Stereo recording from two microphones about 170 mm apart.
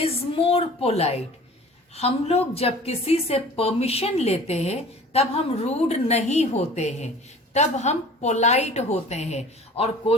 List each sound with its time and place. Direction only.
0.0 s a woman's voice: 35° left (ahead or behind)